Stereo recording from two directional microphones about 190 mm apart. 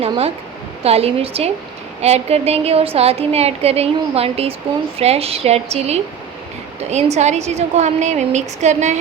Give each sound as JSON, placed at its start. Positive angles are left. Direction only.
{"t": 0.0, "sound": "a woman's voice", "side_deg": -30}